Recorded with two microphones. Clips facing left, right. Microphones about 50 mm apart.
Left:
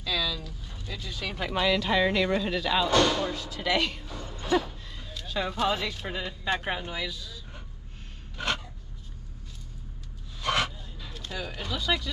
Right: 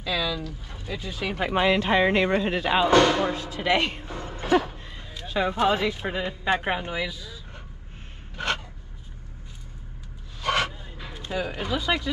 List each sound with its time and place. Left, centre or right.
0.0 s a sound: centre
0.8 s speech: right
11.1 s speech: right